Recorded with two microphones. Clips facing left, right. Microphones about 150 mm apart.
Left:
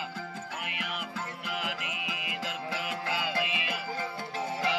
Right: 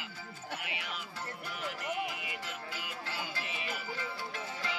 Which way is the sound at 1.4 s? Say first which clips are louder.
Left 1 dB; 90° left.